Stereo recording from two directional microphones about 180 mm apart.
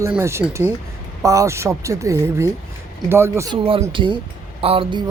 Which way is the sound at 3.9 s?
25° right (ahead or behind).